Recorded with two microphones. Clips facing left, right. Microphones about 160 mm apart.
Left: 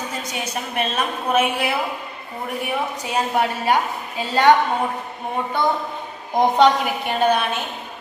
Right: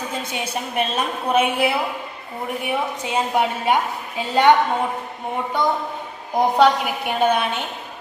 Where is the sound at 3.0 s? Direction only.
20° right (ahead or behind).